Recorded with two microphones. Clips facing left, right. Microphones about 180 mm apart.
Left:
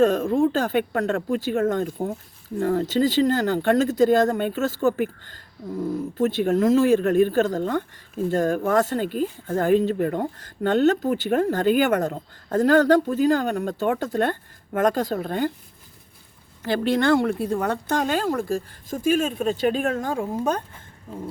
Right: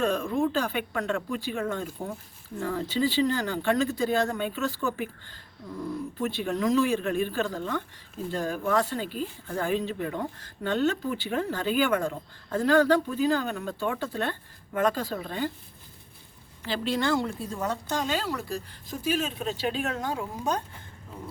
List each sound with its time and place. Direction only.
0.0 s speech: 40° left (ahead or behind)
3.5 s speech: 55° left (ahead or behind)
16.6 s speech: 55° left (ahead or behind)